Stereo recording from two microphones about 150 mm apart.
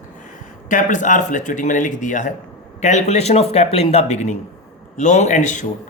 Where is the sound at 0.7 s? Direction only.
60° left (ahead or behind).